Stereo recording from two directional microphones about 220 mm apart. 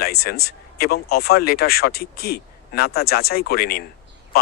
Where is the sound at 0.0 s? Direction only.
45° left (ahead or behind).